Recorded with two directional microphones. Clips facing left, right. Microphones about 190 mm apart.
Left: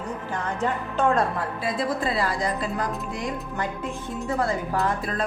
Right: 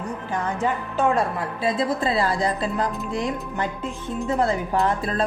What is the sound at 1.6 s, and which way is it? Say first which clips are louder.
Speech: right 4 dB; 25° right (ahead or behind).